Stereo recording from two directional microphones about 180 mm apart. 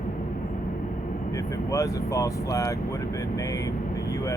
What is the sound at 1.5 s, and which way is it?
Speech, 15° left (ahead or behind).